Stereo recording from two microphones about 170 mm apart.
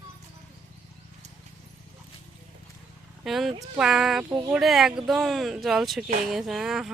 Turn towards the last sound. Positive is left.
turn(degrees=0)  # may be behind; listen again after turning